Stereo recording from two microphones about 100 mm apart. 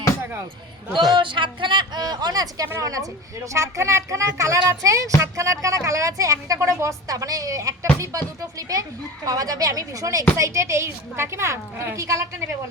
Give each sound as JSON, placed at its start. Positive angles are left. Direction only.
{"t": 1.1, "sound": "a woman's voice", "side_deg": -55}